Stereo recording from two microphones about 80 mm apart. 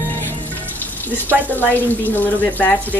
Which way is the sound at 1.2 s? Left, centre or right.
Left.